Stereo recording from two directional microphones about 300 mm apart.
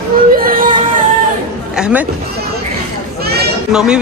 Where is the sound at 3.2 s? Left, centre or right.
Right.